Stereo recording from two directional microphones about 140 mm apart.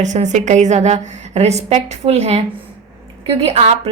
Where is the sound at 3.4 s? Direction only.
50° right (ahead or behind).